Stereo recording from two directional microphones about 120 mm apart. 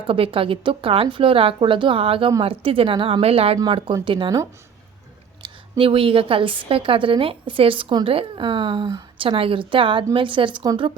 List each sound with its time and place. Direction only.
0.1 s a woman's voice: 50° right (ahead or behind)
5.4 s a woman's voice: 50° right (ahead or behind)